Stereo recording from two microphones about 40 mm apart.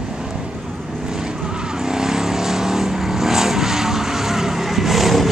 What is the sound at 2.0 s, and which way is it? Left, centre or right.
Vehicle, centre.